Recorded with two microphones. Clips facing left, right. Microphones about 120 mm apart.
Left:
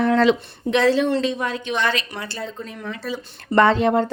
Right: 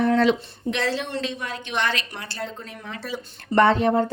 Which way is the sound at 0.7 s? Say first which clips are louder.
Left 7 dB; 65° left (ahead or behind).